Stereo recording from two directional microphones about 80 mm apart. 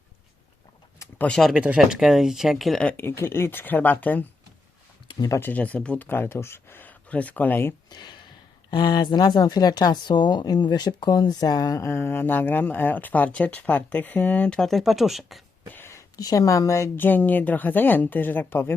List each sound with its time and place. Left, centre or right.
1.5 s speech: centre
1.8 s speech: centre
3.0 s speech: left
5.4 s speech: centre
6.1 s speech: left
7.9 s a sound: left
8.7 s speech: left
11.8 s speech: left; by 15.4 s centre
15.9 s a sound: left
16.2 s speech: left
17.0 s speech: left